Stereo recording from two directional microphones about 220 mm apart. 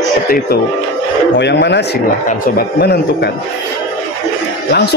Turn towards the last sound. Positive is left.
turn(degrees=45)  # may be behind; listen again after turning